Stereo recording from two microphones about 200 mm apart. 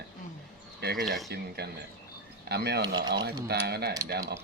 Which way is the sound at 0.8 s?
55° right (ahead or behind).